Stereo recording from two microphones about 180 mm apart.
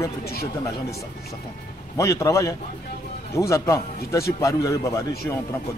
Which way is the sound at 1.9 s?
15° left (ahead or behind).